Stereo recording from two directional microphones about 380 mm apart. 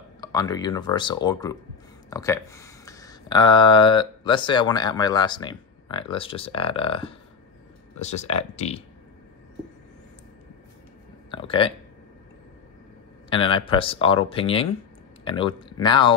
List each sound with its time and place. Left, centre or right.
0.2 s speech: centre
11.2 s speech: centre
13.3 s speech: centre